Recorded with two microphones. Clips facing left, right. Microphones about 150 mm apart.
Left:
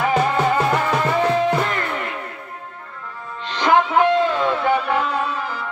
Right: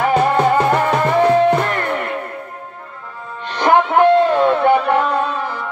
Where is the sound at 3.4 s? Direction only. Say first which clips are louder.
Right 3 dB; 55° right (ahead or behind).